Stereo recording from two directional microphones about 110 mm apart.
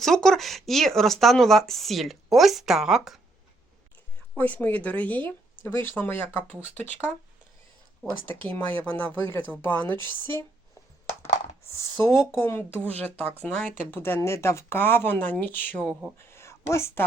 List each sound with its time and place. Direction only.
0.0 s speech: 5° left (ahead or behind)
4.4 s speech: 15° left (ahead or behind)
8.4 s speech: 20° left (ahead or behind)
11.7 s speech: 25° left (ahead or behind)
15.9 s speech: 5° right (ahead or behind)
16.1 s a sound: 25° left (ahead or behind)